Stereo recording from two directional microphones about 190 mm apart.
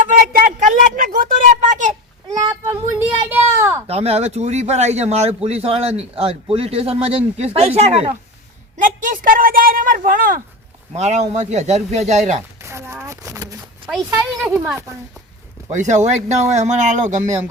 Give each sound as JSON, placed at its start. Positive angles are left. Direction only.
{"t": 0.2, "sound": "a sound", "side_deg": -45}
{"t": 2.5, "sound": "a sound", "side_deg": -15}
{"t": 3.8, "sound": "speech", "side_deg": -35}
{"t": 8.8, "sound": "speech", "side_deg": -45}
{"t": 10.9, "sound": "speech", "side_deg": -35}
{"t": 12.6, "sound": "speech", "side_deg": -15}
{"t": 13.8, "sound": "speech", "side_deg": -5}
{"t": 15.7, "sound": "speech", "side_deg": -40}